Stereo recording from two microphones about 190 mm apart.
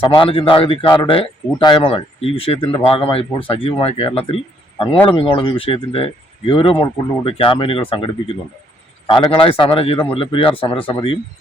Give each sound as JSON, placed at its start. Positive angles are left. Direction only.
{"t": 0.0, "sound": "speech", "side_deg": 25}